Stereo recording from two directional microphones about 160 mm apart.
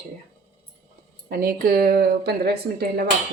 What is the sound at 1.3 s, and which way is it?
Speech, 65° right (ahead or behind).